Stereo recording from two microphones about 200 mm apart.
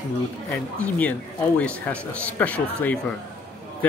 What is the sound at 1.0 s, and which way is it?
Speech, 5° left (ahead or behind).